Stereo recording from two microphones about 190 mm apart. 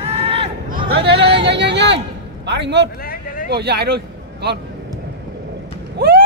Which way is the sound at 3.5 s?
60° right (ahead or behind).